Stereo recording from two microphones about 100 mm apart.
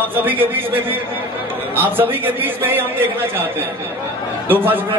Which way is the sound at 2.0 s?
20° right (ahead or behind).